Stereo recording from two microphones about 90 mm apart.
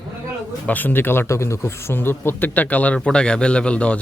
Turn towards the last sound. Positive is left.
turn(degrees=15)  # may be behind; listen again after turning